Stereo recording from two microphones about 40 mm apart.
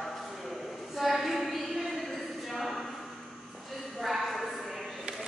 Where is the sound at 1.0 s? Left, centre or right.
Centre.